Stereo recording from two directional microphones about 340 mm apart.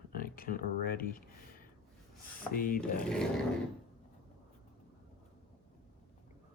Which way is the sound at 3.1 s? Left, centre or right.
Centre.